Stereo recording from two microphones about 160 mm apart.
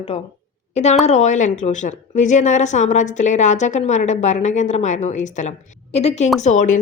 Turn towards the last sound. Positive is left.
turn(degrees=50)  # may be behind; listen again after turning